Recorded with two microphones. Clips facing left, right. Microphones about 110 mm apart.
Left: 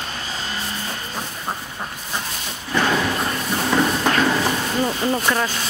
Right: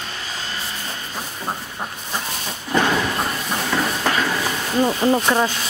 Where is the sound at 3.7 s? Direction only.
10° left (ahead or behind).